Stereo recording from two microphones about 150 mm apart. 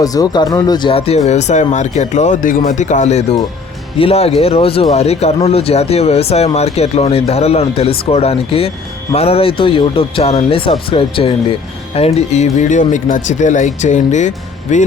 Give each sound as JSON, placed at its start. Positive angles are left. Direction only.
{"t": 0.0, "sound": "speech", "side_deg": 25}